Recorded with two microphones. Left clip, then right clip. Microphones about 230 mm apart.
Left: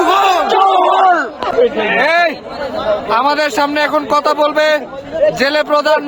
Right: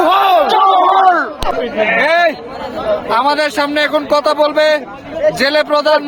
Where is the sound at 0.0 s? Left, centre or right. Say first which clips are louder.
Right 1 dB; centre.